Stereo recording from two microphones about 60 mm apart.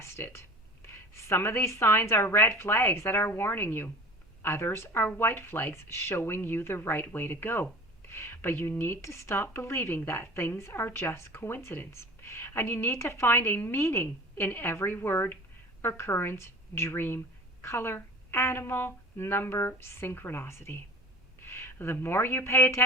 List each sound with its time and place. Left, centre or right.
0.0 s a woman's voice: left
9.4 s a woman's voice: left